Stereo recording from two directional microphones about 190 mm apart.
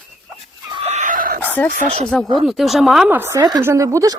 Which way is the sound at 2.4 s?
Centre (ahead or behind).